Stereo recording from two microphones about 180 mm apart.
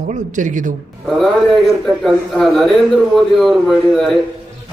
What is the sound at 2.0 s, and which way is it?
Speech, centre (ahead or behind).